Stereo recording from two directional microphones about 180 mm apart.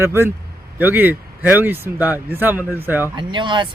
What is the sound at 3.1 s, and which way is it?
Speech, 25° right (ahead or behind).